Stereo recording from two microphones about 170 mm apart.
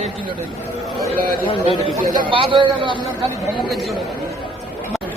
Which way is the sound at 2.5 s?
30° right (ahead or behind).